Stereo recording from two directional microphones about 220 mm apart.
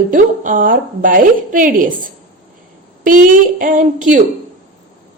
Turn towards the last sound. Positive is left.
turn(degrees=-35)  # may be behind; listen again after turning